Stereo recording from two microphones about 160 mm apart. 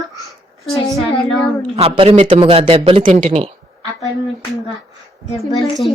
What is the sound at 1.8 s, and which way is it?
Speech, 40° right (ahead or behind).